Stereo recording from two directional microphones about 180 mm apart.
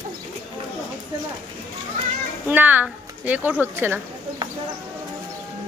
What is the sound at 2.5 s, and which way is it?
Speech, 10° right (ahead or behind).